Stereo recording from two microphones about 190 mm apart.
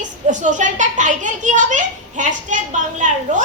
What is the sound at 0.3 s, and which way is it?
A child's voice, 40° right (ahead or behind).